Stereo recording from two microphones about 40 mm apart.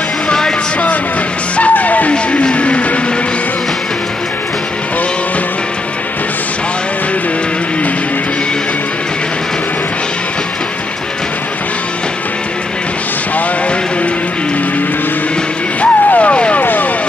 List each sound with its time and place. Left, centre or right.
0.3 s music: centre
1.6 s music: left
15.8 s vehicle: left